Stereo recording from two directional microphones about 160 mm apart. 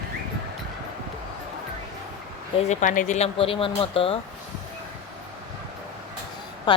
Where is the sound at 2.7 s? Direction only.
50° left (ahead or behind); by 4.1 s 35° left (ahead or behind).